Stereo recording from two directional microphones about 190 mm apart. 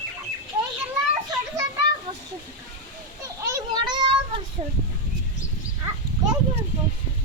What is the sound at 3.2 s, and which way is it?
Children playing, 15° right (ahead or behind).